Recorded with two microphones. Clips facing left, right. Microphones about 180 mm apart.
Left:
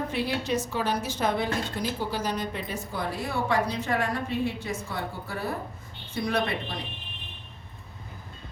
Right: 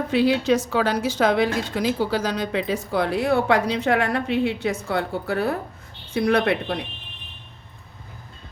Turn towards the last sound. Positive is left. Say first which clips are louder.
# right 7 dB
turn(degrees=-65)  # may be behind; listen again after turning